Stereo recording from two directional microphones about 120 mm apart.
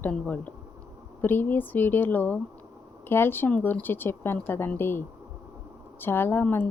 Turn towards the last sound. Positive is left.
turn(degrees=15)  # may be behind; listen again after turning